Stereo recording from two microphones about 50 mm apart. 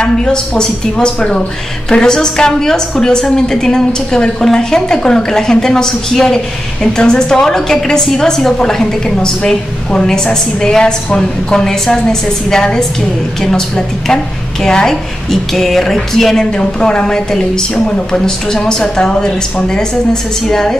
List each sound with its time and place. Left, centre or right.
0.0 s a woman's voice: centre
15.5 s a sound: centre
16.5 s a woman's voice: centre